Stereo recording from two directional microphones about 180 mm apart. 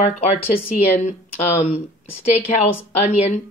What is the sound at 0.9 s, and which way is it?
Speech, 35° left (ahead or behind).